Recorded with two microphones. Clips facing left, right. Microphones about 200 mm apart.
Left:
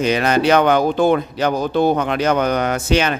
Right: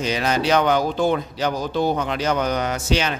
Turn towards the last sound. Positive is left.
turn(degrees=55)  # may be behind; listen again after turning